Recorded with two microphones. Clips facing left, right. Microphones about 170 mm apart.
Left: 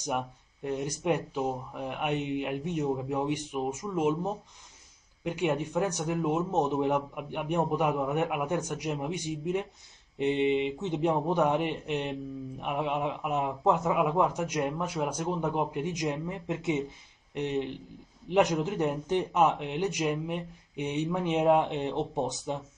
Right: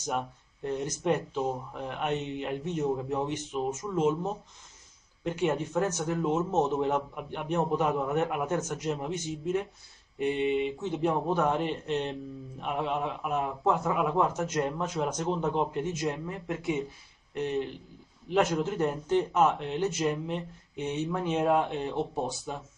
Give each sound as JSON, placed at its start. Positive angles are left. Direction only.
{"t": 0.7, "sound": "speech", "side_deg": 15}